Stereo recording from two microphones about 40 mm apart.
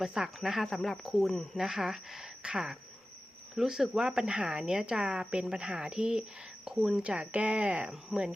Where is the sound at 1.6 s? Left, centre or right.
Centre; by 6.2 s right.